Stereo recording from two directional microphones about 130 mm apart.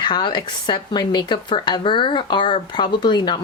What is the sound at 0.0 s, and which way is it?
Speech, 35° left (ahead or behind).